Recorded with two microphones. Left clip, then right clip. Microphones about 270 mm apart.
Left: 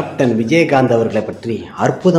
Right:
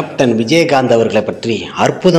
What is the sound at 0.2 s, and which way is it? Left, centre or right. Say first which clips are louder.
A man's voice: right 2 dB; centre.